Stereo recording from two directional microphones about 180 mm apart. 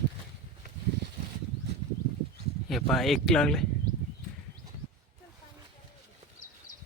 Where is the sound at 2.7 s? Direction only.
Centre (ahead or behind).